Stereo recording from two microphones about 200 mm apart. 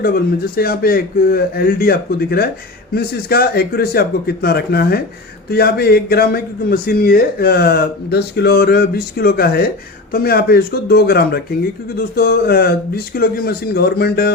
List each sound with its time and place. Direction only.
0.0 s speech: 50° left (ahead or behind)